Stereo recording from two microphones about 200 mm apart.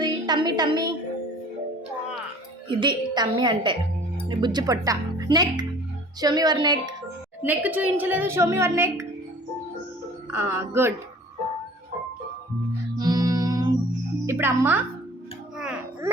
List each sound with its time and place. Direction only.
0.0 s music: 20° right (ahead or behind)
2.6 s speech: 20° right (ahead or behind)
7.4 s speech: 10° right (ahead or behind)
10.3 s speech: 10° right (ahead or behind)
13.0 s music: 20° right (ahead or behind)
14.3 s speech: 10° right (ahead or behind)
15.5 s a sound: 5° right (ahead or behind)